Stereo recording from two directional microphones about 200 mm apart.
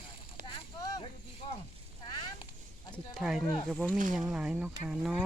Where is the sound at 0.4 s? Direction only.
20° left (ahead or behind).